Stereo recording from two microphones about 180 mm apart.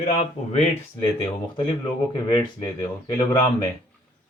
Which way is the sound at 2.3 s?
20° left (ahead or behind).